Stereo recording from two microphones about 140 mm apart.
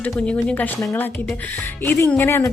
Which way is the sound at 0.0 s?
10° left (ahead or behind).